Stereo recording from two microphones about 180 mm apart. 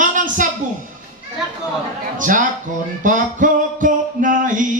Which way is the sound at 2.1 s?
45° right (ahead or behind).